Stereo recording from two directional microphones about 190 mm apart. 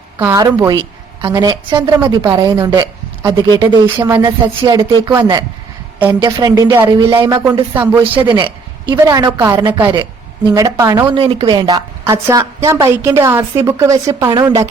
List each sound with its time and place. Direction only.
0.2 s a woman's voice: 15° right (ahead or behind)
7.8 s a woman's voice: 10° right (ahead or behind)
8.3 s a woman's voice: 25° right (ahead or behind)